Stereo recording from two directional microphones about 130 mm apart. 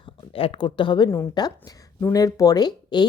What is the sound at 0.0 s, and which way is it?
Speech, 45° left (ahead or behind).